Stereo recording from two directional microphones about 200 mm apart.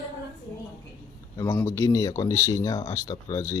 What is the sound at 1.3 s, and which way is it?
Speech, 10° left (ahead or behind).